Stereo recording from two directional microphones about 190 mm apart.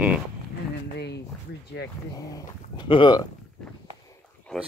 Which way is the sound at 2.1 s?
20° left (ahead or behind).